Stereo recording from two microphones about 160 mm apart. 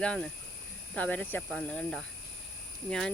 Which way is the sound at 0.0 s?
5° left (ahead or behind).